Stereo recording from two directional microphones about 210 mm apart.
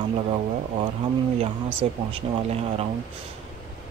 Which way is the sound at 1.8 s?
30° right (ahead or behind).